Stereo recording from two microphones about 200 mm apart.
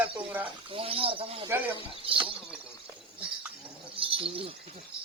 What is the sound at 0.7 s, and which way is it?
Speech, 25° right (ahead or behind).